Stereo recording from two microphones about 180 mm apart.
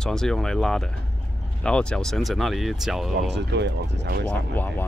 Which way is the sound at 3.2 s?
75° right (ahead or behind).